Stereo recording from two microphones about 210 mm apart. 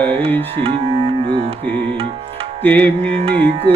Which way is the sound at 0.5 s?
25° right (ahead or behind).